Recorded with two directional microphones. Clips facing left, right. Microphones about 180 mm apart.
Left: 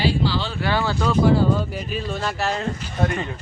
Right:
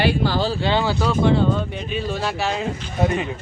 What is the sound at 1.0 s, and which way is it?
Speech, centre (ahead or behind).